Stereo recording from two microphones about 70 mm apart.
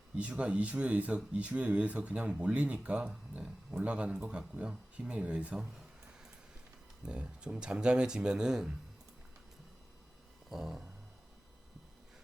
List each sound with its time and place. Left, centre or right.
0.2 s speech: centre
7.0 s speech: centre
10.5 s a sound: centre